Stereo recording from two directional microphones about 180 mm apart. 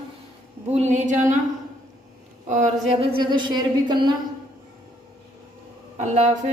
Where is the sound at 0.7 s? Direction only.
40° right (ahead or behind).